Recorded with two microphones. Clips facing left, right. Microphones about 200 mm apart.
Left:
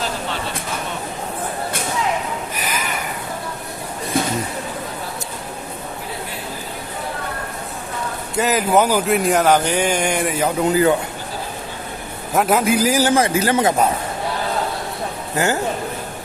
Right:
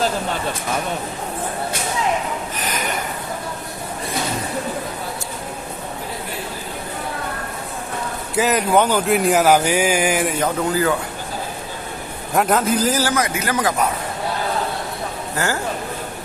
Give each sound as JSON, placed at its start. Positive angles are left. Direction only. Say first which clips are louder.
{"t": 2.6, "sound": "snort", "louder": "even", "side_deg": 10}
{"t": 8.4, "sound": "speech", "louder": "even", "side_deg": 0}
{"t": 10.6, "sound": "speech", "louder": "left 5 dB", "side_deg": 20}
{"t": 12.3, "sound": "a man's voice", "louder": "left 1 dB", "side_deg": 5}
{"t": 13.1, "sound": "speech", "louder": "left 5 dB", "side_deg": 30}
{"t": 15.4, "sound": "a man's voice", "louder": "left 3 dB", "side_deg": 15}